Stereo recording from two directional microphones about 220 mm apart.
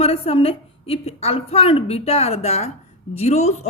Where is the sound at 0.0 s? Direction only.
25° left (ahead or behind).